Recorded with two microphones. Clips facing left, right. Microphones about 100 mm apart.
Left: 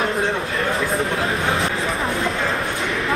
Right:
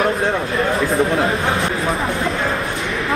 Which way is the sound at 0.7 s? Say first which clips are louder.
Right 5 dB; 30° right (ahead or behind).